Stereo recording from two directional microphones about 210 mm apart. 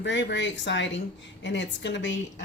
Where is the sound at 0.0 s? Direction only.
60° left (ahead or behind).